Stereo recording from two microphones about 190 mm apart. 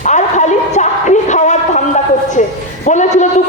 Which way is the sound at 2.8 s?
40° left (ahead or behind).